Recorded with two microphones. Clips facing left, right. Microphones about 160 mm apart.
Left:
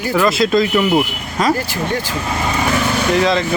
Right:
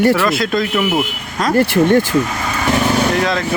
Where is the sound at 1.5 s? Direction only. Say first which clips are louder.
Right 9 dB; 60° right (ahead or behind).